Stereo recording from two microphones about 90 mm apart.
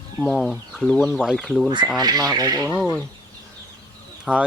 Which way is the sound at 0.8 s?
10° left (ahead or behind).